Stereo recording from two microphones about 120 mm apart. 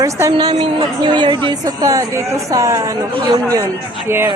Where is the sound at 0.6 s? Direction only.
45° right (ahead or behind); by 4.3 s 20° right (ahead or behind).